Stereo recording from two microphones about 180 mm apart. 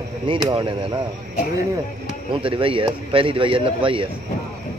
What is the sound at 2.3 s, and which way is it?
A man's voice, 30° right (ahead or behind).